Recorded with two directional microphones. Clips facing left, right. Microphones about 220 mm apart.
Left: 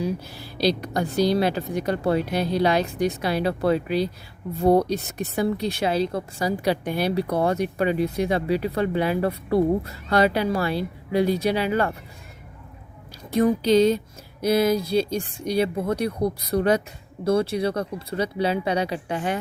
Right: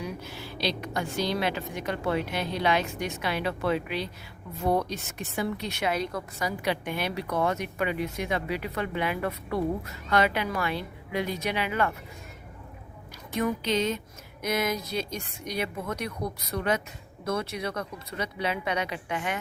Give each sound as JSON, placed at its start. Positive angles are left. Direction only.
{"t": 0.0, "sound": "speech", "side_deg": 35}
{"t": 13.3, "sound": "speech", "side_deg": 35}